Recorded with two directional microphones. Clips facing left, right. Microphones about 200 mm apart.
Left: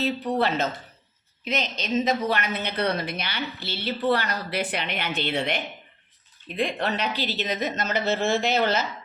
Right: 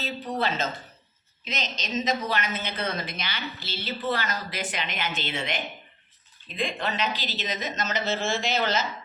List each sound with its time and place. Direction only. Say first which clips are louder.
0.3 s a woman's voice: even; 65° left (ahead or behind)